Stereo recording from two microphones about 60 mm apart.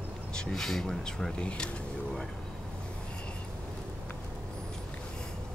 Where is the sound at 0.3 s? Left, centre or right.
Centre.